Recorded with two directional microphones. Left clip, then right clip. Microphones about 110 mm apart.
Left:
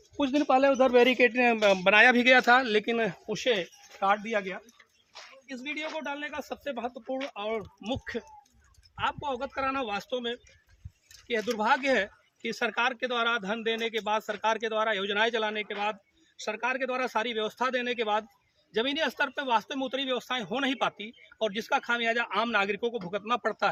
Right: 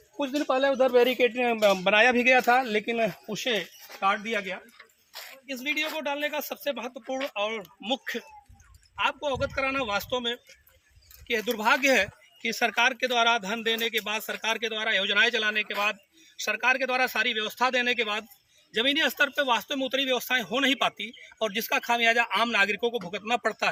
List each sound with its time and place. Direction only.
0.2 s speech: 50° left (ahead or behind); by 23.6 s 20° left (ahead or behind)